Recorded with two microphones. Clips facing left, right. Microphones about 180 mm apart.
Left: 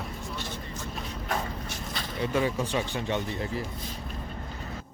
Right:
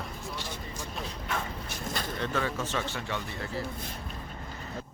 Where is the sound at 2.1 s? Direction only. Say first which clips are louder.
Left 6 dB; 10° left (ahead or behind).